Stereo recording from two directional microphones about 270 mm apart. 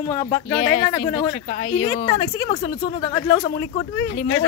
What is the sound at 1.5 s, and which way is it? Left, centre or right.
Speech, left.